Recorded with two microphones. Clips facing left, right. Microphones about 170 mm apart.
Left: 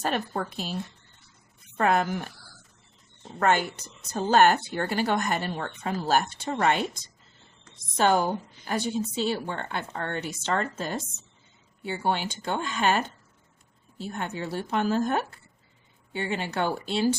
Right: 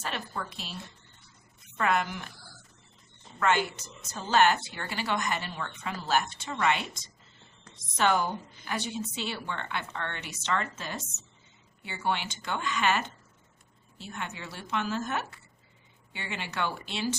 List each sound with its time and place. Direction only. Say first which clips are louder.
0.0 s a woman's voice: left 7 dB; 45° left (ahead or behind)
1.8 s a woman's voice: left 4 dB; 40° left (ahead or behind)
3.3 s a woman's voice: left 3 dB; 45° left (ahead or behind)
7.9 s a woman's voice: left 4 dB; 40° left (ahead or behind)
16.1 s a woman's voice: left 7 dB; 40° left (ahead or behind)